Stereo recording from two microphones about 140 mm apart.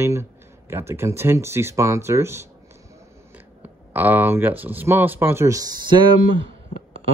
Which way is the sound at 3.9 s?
10° right (ahead or behind).